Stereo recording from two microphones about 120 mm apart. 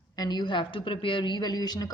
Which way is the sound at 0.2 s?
35° left (ahead or behind).